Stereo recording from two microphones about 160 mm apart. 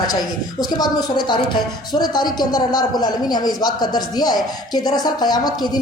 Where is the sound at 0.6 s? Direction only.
25° left (ahead or behind).